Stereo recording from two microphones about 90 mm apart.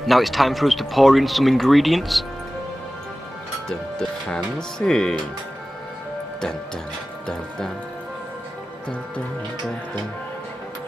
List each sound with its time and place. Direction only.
0.0 s speech: centre (ahead or behind)
4.6 s speech: 5° left (ahead or behind)
7.2 s speech: 5° left (ahead or behind)